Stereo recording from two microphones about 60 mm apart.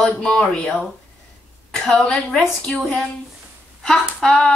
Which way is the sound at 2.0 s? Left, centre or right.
Centre.